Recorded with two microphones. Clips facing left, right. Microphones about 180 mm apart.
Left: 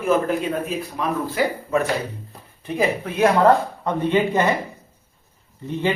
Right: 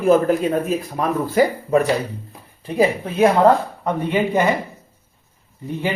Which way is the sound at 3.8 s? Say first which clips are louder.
Even; 15° right (ahead or behind).